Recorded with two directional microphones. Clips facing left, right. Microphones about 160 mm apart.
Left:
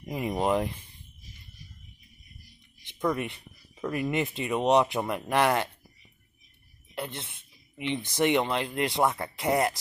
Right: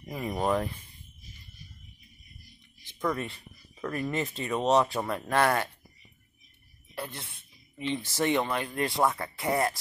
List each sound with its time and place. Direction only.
0.0 s speech: 20° left (ahead or behind)
2.8 s speech: 20° left (ahead or behind)
7.0 s speech: 25° left (ahead or behind)